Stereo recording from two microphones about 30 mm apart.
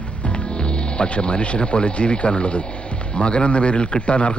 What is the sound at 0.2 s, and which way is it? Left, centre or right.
Speech, left.